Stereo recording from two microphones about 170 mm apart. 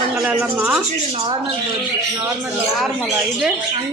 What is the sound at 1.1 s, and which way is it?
Speech, 25° right (ahead or behind).